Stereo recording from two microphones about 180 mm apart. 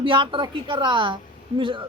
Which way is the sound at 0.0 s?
30° right (ahead or behind).